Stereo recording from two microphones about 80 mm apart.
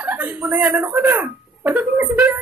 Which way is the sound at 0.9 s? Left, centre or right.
Right.